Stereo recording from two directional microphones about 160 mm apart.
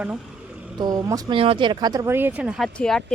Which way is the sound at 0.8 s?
25° right (ahead or behind).